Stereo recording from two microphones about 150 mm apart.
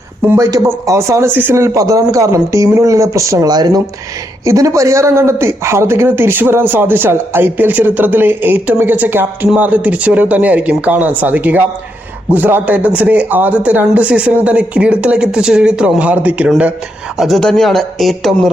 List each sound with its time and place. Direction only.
0.2 s a man's voice: 15° right (ahead or behind); by 18.5 s centre (ahead or behind)